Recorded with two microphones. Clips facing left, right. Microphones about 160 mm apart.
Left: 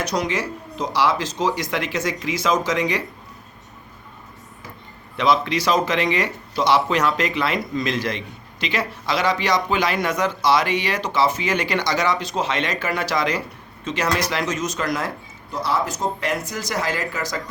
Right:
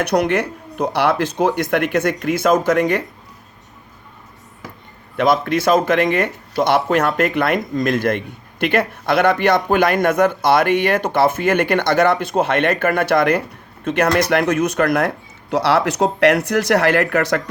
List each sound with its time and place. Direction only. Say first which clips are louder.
0.0 s speech: right 6 dB; 60° right (ahead or behind)
5.1 s speech: right 3 dB; 50° right (ahead or behind); by 17.4 s 65° right (ahead or behind)